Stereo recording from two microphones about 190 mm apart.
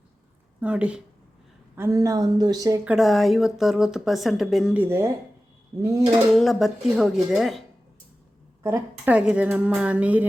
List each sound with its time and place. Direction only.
0.6 s a woman's voice: 5° right (ahead or behind)
2.8 s a woman's voice: centre (ahead or behind)
6.3 s speech: centre (ahead or behind)
8.6 s a woman's voice: 10° right (ahead or behind)